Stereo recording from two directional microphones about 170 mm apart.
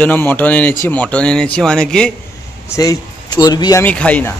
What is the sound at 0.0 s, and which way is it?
A man's voice, 10° left (ahead or behind).